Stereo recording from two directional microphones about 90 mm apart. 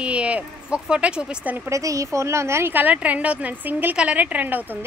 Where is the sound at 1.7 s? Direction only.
35° right (ahead or behind).